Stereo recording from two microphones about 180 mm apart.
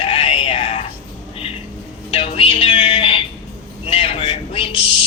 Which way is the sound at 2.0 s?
30° left (ahead or behind).